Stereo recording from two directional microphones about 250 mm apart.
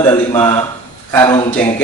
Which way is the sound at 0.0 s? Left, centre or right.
Centre.